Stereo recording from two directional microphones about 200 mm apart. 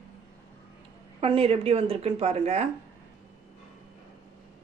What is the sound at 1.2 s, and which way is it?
Speech, 30° right (ahead or behind).